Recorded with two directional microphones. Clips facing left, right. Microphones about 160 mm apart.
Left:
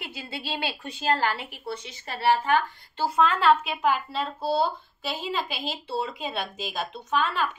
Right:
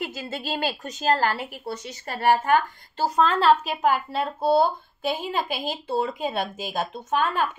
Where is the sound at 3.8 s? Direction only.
50° right (ahead or behind).